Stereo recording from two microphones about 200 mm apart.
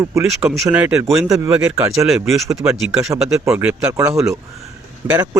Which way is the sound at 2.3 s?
15° right (ahead or behind).